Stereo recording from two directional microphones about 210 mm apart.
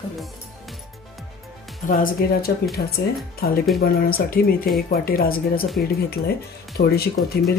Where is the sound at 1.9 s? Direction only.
40° left (ahead or behind).